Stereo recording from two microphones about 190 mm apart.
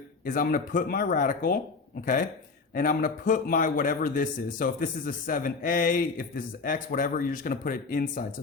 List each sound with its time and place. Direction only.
0.3 s a man's voice: 45° left (ahead or behind)
2.7 s a man's voice: 45° left (ahead or behind)